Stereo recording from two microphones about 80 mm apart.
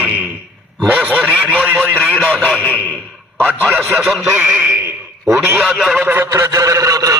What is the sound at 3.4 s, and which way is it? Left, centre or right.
Speech, right.